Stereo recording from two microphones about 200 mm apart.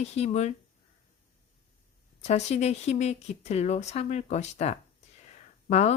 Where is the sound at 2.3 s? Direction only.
35° left (ahead or behind).